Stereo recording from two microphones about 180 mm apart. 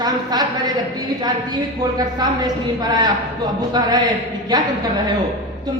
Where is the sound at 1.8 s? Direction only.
20° right (ahead or behind).